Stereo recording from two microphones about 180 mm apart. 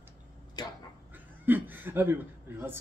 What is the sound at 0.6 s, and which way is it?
Speech, 25° left (ahead or behind).